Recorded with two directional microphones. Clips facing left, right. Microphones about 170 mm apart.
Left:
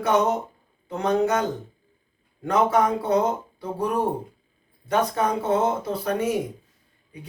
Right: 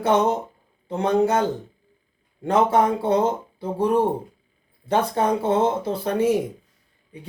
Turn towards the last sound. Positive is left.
turn(degrees=-30)  # may be behind; listen again after turning